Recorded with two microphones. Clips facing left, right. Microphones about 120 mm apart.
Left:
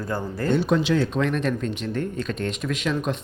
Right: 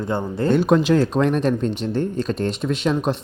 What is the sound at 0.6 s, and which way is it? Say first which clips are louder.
Speech: right 5 dB; 45° right (ahead or behind).